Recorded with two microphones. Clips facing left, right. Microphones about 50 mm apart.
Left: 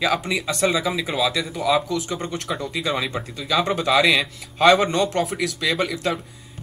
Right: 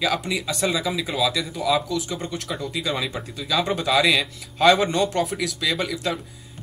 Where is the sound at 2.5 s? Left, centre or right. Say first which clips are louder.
Left 4 dB; left.